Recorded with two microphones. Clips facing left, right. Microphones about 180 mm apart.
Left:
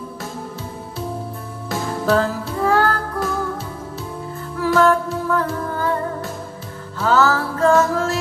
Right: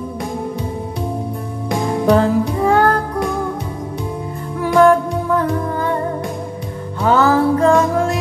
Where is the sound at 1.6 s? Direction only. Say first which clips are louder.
Right 5 dB; 15° right (ahead or behind).